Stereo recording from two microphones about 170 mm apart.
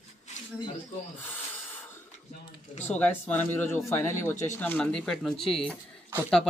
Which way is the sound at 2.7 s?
40° left (ahead or behind).